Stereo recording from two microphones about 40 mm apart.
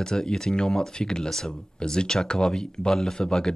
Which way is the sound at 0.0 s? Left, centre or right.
Centre.